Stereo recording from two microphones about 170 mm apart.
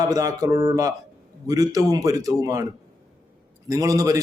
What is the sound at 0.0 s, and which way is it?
A man's voice, 20° right (ahead or behind).